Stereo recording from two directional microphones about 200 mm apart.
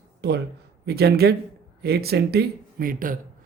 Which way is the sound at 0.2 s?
55° right (ahead or behind).